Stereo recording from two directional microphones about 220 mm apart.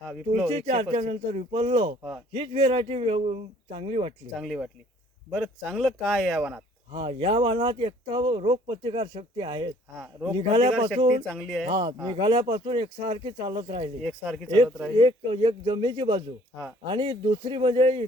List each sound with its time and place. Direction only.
0.3 s speech: 30° right (ahead or behind)
4.4 s speech: centre (ahead or behind)
6.9 s speech: 25° right (ahead or behind)
10.0 s speech: 5° right (ahead or behind)
10.3 s speech: 25° right (ahead or behind)
11.3 s speech: centre (ahead or behind)
11.7 s speech: 20° right (ahead or behind)
14.0 s speech: 5° left (ahead or behind)
14.9 s speech: 25° right (ahead or behind)